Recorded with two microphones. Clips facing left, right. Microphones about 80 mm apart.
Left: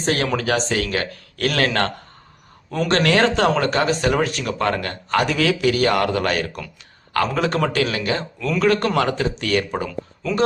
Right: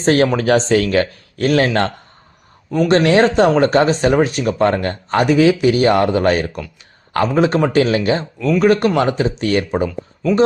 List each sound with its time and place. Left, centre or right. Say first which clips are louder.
0.0 s speech: right 7 dB; right
1.1 s speech: right 7 dB; right
2.6 s speech: right 7 dB; centre
2.9 s speech: right 5 dB; right